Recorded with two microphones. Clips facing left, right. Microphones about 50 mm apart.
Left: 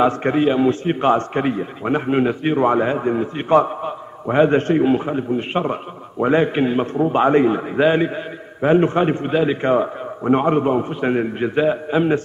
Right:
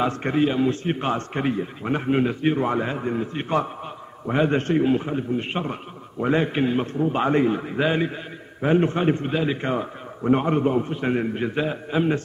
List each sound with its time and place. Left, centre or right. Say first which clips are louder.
0.0 s a man's voice: left 5 dB; left